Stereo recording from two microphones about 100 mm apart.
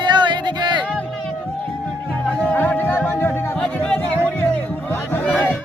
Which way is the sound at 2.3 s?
15° left (ahead or behind).